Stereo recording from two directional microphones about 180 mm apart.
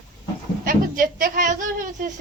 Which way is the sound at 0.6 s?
50° right (ahead or behind).